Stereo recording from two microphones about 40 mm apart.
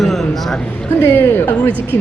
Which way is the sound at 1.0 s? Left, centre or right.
Left.